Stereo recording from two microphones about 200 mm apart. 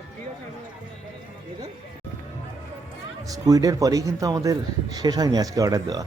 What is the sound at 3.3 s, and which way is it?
Speech, 15° right (ahead or behind).